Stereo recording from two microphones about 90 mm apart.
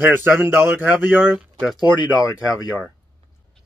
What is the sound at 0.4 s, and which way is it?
Speech, 20° right (ahead or behind).